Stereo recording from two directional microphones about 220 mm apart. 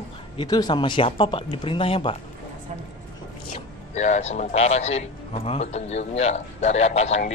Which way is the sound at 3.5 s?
30° left (ahead or behind).